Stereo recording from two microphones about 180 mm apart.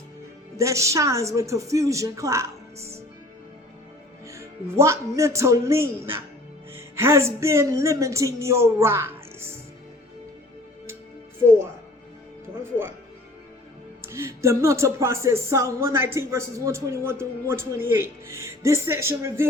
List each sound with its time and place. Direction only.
0.5 s speech: 15° right (ahead or behind)
4.3 s speech: 15° right (ahead or behind)
14.0 s speech: 15° right (ahead or behind)